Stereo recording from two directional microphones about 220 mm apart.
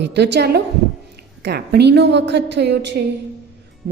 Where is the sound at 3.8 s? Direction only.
45° right (ahead or behind).